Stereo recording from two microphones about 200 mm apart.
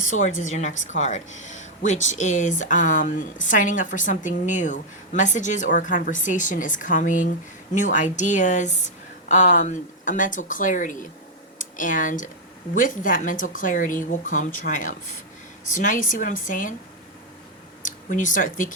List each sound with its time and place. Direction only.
0.1 s a woman's voice: 40° left (ahead or behind)
17.8 s speech: 40° left (ahead or behind)